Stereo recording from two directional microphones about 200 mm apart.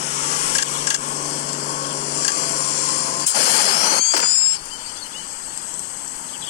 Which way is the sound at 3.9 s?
55° left (ahead or behind).